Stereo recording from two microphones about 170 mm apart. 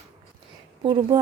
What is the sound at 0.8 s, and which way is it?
Speech, 25° right (ahead or behind).